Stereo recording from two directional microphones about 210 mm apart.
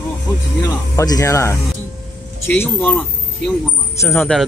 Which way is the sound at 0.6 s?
15° left (ahead or behind).